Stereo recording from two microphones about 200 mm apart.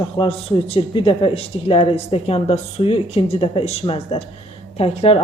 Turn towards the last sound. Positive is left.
turn(degrees=30)  # may be behind; listen again after turning